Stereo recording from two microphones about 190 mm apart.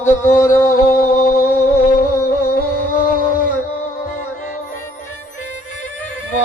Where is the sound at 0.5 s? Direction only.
15° left (ahead or behind).